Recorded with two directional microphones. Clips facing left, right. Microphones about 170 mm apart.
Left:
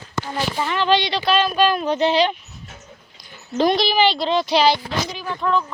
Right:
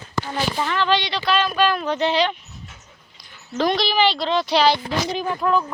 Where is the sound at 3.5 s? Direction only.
25° left (ahead or behind).